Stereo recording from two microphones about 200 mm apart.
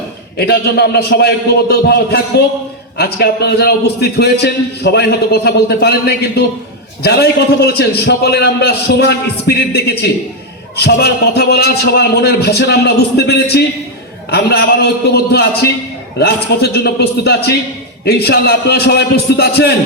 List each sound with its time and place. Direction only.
0.3 s a man's voice: 55° left (ahead or behind)